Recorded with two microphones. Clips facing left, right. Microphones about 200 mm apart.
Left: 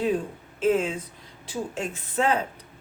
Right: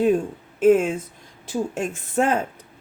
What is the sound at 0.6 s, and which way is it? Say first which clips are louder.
Speech: right 7 dB; 50° right (ahead or behind).